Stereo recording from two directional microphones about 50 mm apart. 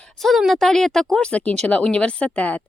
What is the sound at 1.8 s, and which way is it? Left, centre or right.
Speech, left.